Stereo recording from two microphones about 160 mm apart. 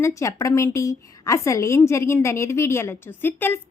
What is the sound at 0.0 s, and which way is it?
A woman's voice, 20° left (ahead or behind).